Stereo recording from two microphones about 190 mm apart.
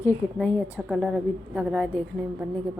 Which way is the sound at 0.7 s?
5° right (ahead or behind).